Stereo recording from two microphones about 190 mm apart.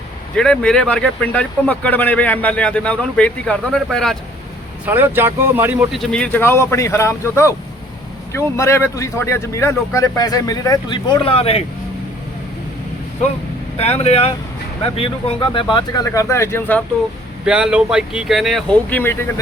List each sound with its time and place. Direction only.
0.3 s speech: 5° left (ahead or behind)
4.9 s speech: 10° right (ahead or behind)
5.9 s speech: 5° left (ahead or behind); by 11.6 s 30° left (ahead or behind)
13.7 s speech: 35° left (ahead or behind); by 16.8 s 10° left (ahead or behind)
17.4 s speech: 5° right (ahead or behind)